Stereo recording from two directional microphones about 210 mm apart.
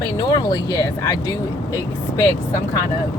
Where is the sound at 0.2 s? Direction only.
20° left (ahead or behind).